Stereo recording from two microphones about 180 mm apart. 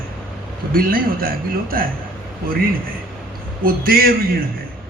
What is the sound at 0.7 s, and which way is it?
A man's voice, 55° right (ahead or behind).